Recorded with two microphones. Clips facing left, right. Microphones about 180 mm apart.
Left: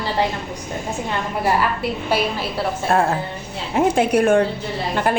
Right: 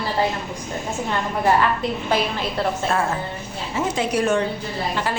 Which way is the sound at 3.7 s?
55° left (ahead or behind).